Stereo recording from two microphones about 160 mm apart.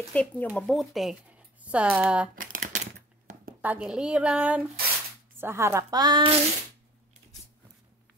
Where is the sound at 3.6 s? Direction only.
5° right (ahead or behind); by 6.4 s 30° right (ahead or behind).